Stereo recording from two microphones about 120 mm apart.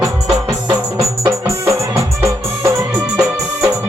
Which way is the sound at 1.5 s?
25° right (ahead or behind).